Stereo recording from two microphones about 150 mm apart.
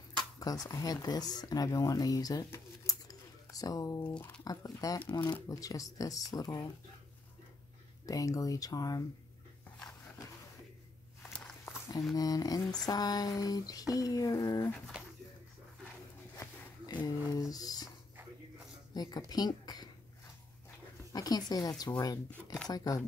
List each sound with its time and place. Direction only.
0.7 s speech: 25° left (ahead or behind)
8.1 s speech: 25° left (ahead or behind)
11.7 s a sound: 20° left (ahead or behind)
12.2 s speech: 25° left (ahead or behind)
16.3 s a sound: 25° left (ahead or behind)
18.9 s a woman's voice: 25° left (ahead or behind)
21.1 s speech: 25° left (ahead or behind)